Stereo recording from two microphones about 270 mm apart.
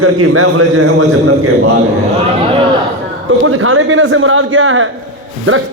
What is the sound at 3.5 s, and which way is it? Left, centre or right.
A man's voice, right.